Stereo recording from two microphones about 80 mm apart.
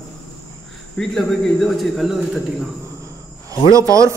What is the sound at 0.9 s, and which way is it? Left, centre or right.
Speech, centre.